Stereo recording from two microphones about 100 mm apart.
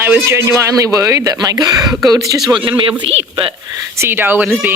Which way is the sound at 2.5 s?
55° right (ahead or behind).